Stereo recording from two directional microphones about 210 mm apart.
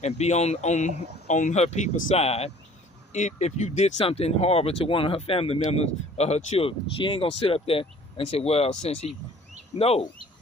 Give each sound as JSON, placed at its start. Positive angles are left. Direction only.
{"t": 0.0, "sound": "speech", "side_deg": 30}